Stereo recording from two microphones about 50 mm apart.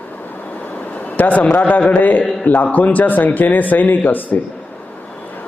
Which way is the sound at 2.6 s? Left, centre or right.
Left.